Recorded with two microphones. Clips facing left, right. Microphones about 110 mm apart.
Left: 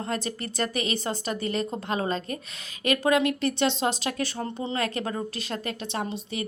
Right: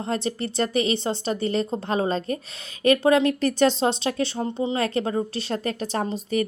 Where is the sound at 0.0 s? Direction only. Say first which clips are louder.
Right 4 dB; 30° right (ahead or behind).